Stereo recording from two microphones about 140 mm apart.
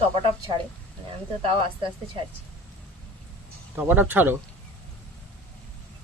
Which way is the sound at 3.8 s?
15° right (ahead or behind).